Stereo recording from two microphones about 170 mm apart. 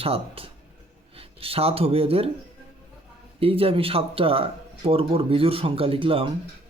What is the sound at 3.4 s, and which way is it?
Speech, 35° right (ahead or behind).